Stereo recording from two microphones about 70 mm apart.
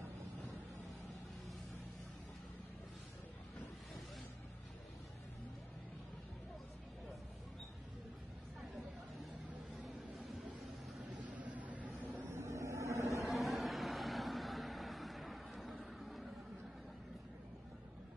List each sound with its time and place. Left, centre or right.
9.8 s vehicle: centre
11.2 s vehicle: right
12.3 s vehicle: right
13.2 s vehicle: centre